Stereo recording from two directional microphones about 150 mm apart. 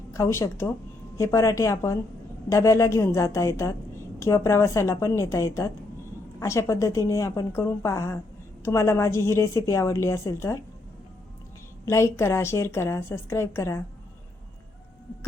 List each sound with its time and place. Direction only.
0.1 s a woman's voice: 20° left (ahead or behind)
11.9 s a woman's voice: 20° left (ahead or behind)